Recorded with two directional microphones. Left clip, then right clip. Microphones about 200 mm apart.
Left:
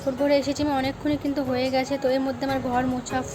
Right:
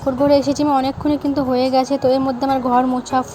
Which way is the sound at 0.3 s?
25° right (ahead or behind).